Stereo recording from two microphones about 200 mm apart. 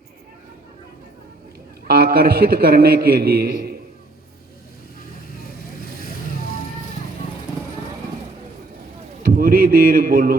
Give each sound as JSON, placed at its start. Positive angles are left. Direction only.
{"t": 1.9, "sound": "a man's voice", "side_deg": -50}
{"t": 9.2, "sound": "a man's voice", "side_deg": -45}